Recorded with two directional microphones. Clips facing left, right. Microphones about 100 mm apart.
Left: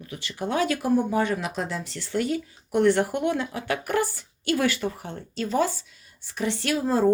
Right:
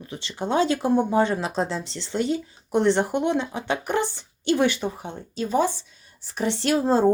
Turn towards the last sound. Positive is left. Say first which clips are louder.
# right 3 dB
turn(degrees=-25)  # may be behind; listen again after turning